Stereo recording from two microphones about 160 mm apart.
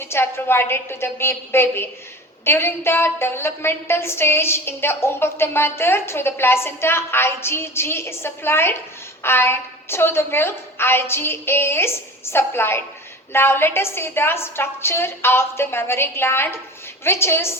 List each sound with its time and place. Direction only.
0.0 s a woman's voice: 15° left (ahead or behind)